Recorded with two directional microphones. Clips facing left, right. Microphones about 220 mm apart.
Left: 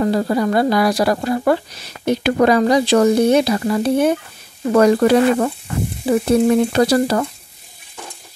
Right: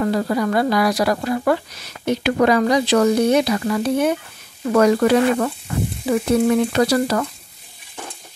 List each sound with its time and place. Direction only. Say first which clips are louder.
0.0 s a woman's voice: left 2 dB; 30° left (ahead or behind)